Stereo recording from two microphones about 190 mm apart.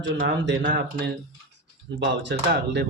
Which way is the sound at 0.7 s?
60° right (ahead or behind).